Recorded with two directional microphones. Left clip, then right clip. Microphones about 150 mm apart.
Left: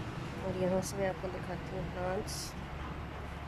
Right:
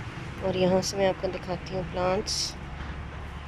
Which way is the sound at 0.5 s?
5° right (ahead or behind).